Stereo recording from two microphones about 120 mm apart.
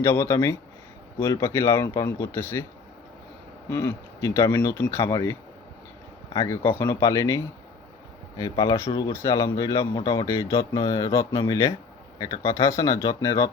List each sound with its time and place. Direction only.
0.0 s speech: 20° left (ahead or behind)
3.7 s speech: 25° left (ahead or behind)
6.8 s speech: 30° left (ahead or behind)